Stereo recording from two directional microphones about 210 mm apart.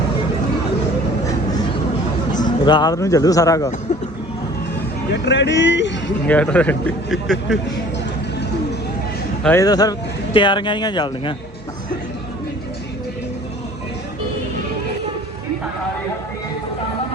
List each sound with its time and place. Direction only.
2.3 s speech: 20° left (ahead or behind)
5.1 s speech: 55° left (ahead or behind)
6.2 s a man's voice: 5° left (ahead or behind)
9.4 s speech: 10° left (ahead or behind)